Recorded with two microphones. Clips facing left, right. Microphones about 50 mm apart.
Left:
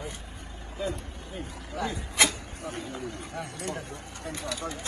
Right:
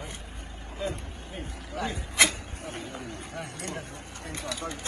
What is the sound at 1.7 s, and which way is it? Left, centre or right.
Speech, right.